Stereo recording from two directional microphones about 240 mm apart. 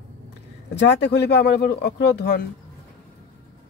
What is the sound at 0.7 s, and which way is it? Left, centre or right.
Speech, left.